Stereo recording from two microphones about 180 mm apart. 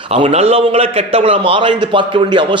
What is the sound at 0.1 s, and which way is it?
A man's voice, 35° right (ahead or behind).